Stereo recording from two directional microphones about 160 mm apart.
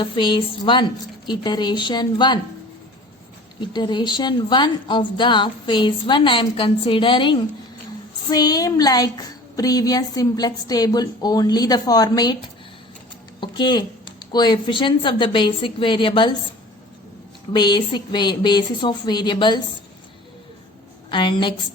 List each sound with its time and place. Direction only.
0.0 s a woman's voice: 30° left (ahead or behind)
3.6 s a woman's voice: 30° left (ahead or behind)
13.4 s a sound: 25° left (ahead or behind)
14.3 s a woman's voice: 25° left (ahead or behind)
17.5 s a woman's voice: 30° left (ahead or behind)
21.1 s a woman's voice: 30° left (ahead or behind)